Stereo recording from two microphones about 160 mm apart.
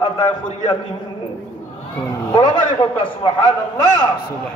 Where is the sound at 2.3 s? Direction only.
30° left (ahead or behind).